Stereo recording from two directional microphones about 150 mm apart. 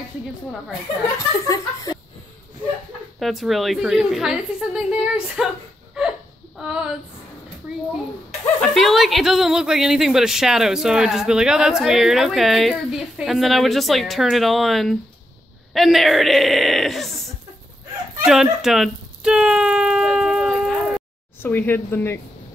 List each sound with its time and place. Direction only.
1.1 s speech: 25° left (ahead or behind)
3.2 s speech: centre (ahead or behind)
6.6 s female singing: 5° right (ahead or behind)
8.5 s speech: centre (ahead or behind)
18.2 s a sound: centre (ahead or behind)
21.4 s speech: 15° left (ahead or behind)